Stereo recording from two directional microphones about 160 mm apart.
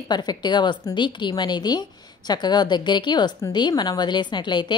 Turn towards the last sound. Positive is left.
turn(degrees=30)  # may be behind; listen again after turning